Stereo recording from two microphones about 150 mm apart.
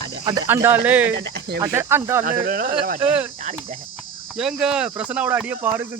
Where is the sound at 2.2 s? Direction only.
70° right (ahead or behind).